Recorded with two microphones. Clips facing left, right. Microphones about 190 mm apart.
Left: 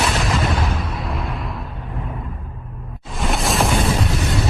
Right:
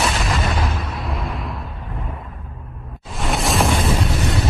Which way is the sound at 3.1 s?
Centre (ahead or behind).